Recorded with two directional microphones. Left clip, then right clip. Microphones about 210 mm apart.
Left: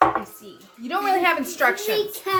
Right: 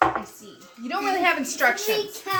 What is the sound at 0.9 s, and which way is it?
Speech, 10° left (ahead or behind).